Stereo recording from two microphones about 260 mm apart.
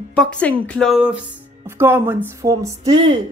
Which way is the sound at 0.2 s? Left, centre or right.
Centre.